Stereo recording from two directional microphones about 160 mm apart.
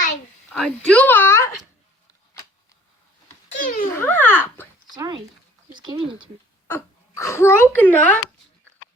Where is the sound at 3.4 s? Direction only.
55° left (ahead or behind).